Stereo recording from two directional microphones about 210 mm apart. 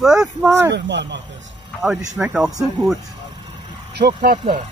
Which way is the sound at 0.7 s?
55° right (ahead or behind).